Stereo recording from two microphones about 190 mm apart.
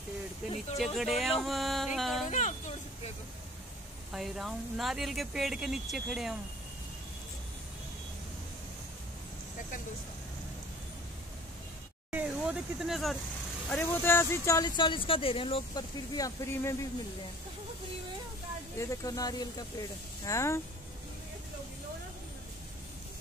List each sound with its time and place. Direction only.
0.7 s speech: centre (ahead or behind)
2.2 s speech: 40° left (ahead or behind)
4.1 s speech: centre (ahead or behind)
12.1 s speech: 5° right (ahead or behind)
13.7 s speech: 10° left (ahead or behind); by 15.8 s 30° left (ahead or behind)
16.2 s speech: 15° left (ahead or behind)
18.8 s speech: 20° left (ahead or behind)